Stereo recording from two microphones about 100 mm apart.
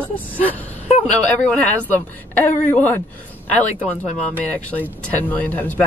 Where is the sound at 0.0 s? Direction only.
15° left (ahead or behind).